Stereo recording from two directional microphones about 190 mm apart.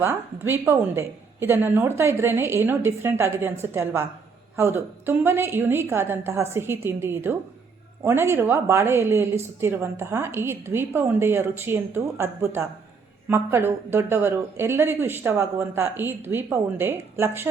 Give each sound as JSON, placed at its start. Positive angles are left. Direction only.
{"t": 0.0, "sound": "a woman's voice", "side_deg": -10}